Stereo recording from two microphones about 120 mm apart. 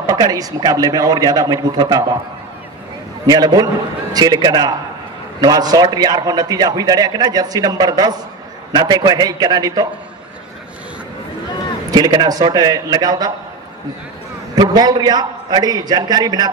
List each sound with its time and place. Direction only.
0.1 s a man's voice: 30° right (ahead or behind)
3.3 s a man's voice: 35° right (ahead or behind)
11.9 s a man's voice: 35° right (ahead or behind)
14.5 s a man's voice: 35° right (ahead or behind)